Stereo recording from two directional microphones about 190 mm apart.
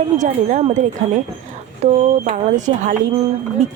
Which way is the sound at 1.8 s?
40° right (ahead or behind).